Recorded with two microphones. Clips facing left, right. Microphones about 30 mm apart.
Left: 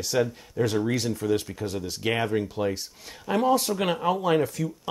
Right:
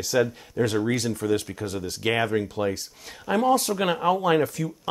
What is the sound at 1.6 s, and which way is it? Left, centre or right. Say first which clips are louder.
Speech: even; right.